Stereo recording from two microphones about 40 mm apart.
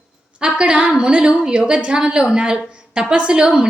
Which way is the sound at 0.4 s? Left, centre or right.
Right.